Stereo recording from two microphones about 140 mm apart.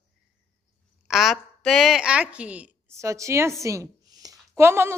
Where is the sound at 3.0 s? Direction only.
20° right (ahead or behind).